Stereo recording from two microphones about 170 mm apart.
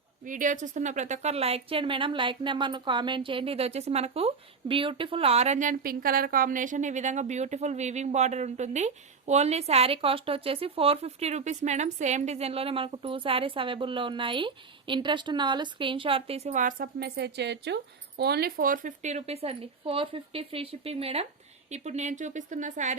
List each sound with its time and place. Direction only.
0.3 s speech: 50° right (ahead or behind); by 17.7 s 90° right
18.2 s speech: 70° right (ahead or behind); by 23.0 s 45° right (ahead or behind)